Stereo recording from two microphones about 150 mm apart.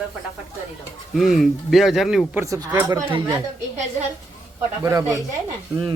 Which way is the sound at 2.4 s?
20° right (ahead or behind).